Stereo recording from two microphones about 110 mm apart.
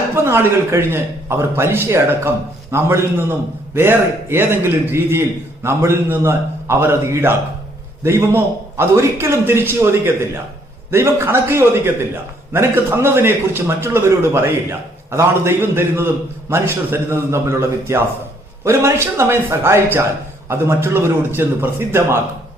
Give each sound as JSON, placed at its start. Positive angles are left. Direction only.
{"t": 0.3, "sound": "a man's voice", "side_deg": -25}